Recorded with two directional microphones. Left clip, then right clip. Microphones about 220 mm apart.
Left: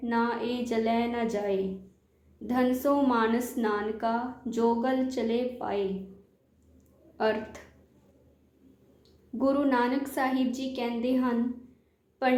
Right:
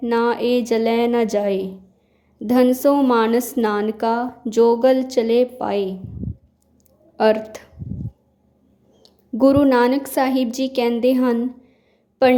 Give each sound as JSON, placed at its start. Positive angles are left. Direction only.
{"t": 0.0, "sound": "a woman's voice", "side_deg": -50}
{"t": 7.2, "sound": "a woman's voice", "side_deg": -45}
{"t": 9.4, "sound": "a woman's voice", "side_deg": -50}